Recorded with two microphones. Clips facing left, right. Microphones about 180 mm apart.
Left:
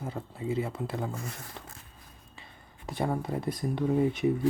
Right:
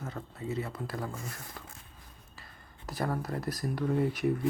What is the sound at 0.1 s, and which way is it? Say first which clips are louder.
Speech: left 5 dB; 25° left (ahead or behind).